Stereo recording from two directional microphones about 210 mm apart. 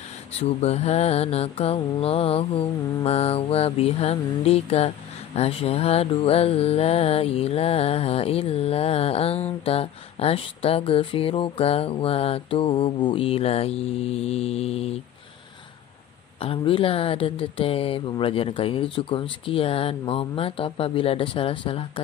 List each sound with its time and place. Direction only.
0.4 s mantra: 30° left (ahead or behind)
16.3 s mantra: 25° left (ahead or behind)